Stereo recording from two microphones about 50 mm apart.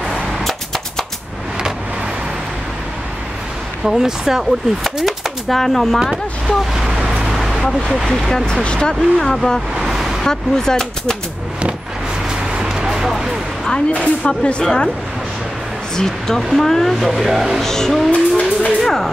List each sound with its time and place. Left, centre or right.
0.1 s a sound: centre
3.8 s speech: centre
6.4 s vehicle: centre
8.3 s a woman's voice: centre
9.3 s speech: centre
9.8 s vehicle: centre
10.2 s speech: centre
12.3 s vehicle: centre
13.7 s a woman's voice: left
16.0 s speech: centre
17.3 s speech: centre
17.6 s speech: centre
18.1 s vehicle: left
18.8 s a sound: centre